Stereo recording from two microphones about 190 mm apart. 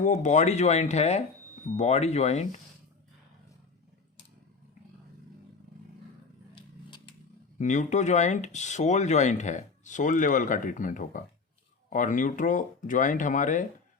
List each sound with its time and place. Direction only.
0.0 s speech: 40° left (ahead or behind)
6.5 s a sound: 25° left (ahead or behind)
7.6 s speech: 40° left (ahead or behind)